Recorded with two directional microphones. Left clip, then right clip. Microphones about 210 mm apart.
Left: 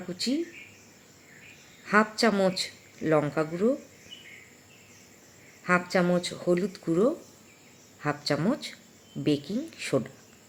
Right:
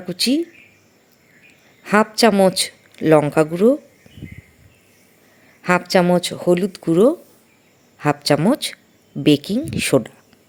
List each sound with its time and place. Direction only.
0.1 s a man's voice: 35° right (ahead or behind)
1.8 s a man's voice: 35° right (ahead or behind)
5.6 s a man's voice: 35° right (ahead or behind)